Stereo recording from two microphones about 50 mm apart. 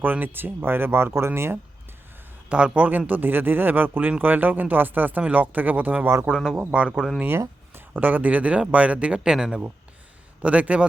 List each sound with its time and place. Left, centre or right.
0.0 s speech: right
2.5 s speech: right
3.1 s speech: right
6.2 s speech: centre
6.7 s speech: right
7.3 s speech: right; by 9.6 s centre
10.4 s speech: right